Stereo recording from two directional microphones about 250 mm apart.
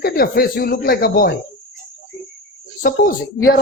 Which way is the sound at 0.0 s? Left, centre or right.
Left.